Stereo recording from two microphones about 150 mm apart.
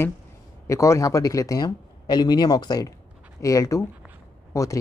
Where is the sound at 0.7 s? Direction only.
20° left (ahead or behind).